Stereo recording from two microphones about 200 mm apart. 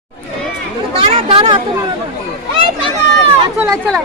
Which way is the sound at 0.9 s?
30° right (ahead or behind).